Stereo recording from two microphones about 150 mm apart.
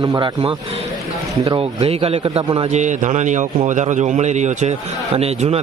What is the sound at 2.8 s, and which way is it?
A man's voice, 55° right (ahead or behind).